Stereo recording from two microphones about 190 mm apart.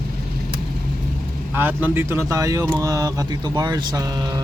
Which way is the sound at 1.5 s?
10° right (ahead or behind).